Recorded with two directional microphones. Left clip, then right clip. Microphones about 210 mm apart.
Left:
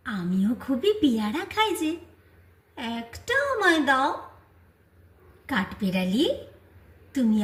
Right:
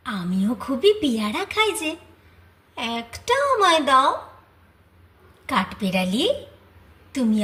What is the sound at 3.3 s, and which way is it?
Speech, 5° left (ahead or behind).